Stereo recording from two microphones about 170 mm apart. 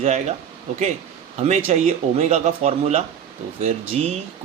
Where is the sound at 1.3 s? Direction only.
40° right (ahead or behind).